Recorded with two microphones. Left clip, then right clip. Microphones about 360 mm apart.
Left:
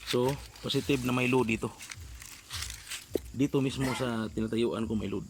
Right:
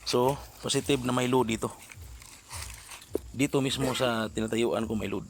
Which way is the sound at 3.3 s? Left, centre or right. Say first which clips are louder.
Right 3 dB; centre.